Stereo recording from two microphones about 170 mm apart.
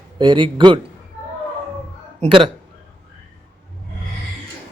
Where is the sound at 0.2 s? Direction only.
30° right (ahead or behind).